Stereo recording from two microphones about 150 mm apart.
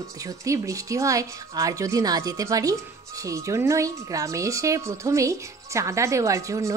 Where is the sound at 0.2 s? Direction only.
20° right (ahead or behind).